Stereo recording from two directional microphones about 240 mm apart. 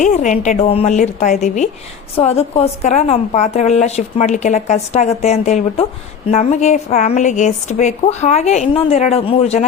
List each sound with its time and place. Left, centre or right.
0.0 s a woman's voice: left